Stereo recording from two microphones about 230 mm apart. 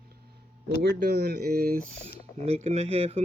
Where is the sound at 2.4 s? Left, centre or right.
Right.